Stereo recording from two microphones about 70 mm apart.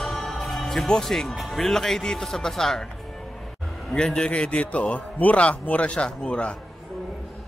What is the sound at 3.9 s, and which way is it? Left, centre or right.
A man's voice, centre.